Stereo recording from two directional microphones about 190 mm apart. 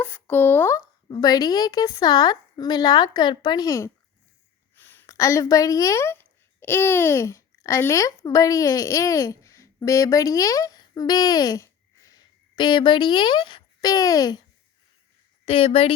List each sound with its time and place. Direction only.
0.0 s a woman's voice: 10° left (ahead or behind)
15.4 s speech: 30° left (ahead or behind)